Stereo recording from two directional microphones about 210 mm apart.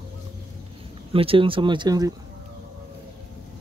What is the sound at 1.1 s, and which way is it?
Speech, 25° right (ahead or behind).